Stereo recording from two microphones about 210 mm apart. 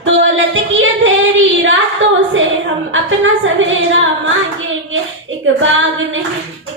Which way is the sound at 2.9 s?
65° right (ahead or behind).